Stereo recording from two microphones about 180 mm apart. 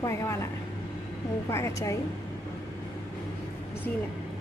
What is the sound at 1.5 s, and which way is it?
Speech, 15° left (ahead or behind).